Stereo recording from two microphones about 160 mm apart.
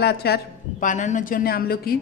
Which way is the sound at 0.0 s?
90° left.